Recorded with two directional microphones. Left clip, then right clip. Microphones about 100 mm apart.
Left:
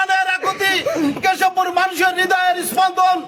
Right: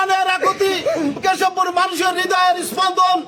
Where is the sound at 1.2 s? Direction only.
15° left (ahead or behind).